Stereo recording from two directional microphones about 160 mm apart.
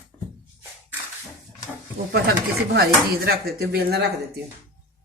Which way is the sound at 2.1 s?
85° right.